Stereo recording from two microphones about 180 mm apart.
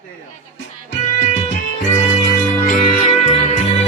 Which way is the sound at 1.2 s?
40° left (ahead or behind).